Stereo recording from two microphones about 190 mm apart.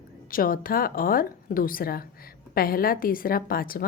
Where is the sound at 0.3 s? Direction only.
50° left (ahead or behind).